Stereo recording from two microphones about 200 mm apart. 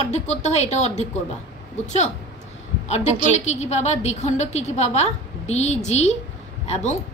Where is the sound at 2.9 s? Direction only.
35° left (ahead or behind).